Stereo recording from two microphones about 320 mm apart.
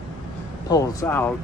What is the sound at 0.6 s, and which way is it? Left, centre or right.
Speech, centre.